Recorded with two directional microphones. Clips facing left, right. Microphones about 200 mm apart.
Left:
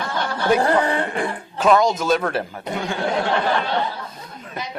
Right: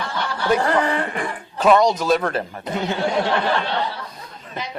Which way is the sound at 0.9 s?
30° left (ahead or behind).